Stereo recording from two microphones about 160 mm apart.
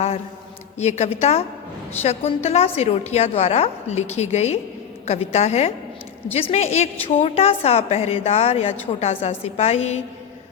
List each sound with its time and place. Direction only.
0.8 s a woman's voice: 45° left (ahead or behind)